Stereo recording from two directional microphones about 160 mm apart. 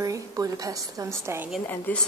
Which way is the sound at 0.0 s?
20° right (ahead or behind).